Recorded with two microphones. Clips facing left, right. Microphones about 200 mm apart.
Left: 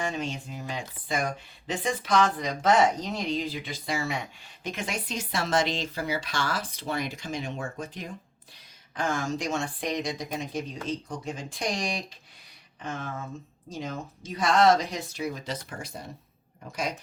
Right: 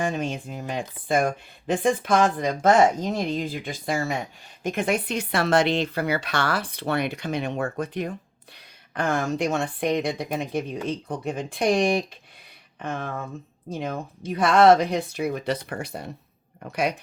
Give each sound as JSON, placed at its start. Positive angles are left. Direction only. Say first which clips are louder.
{"t": 0.0, "sound": "speech", "louder": "right 5 dB", "side_deg": -50}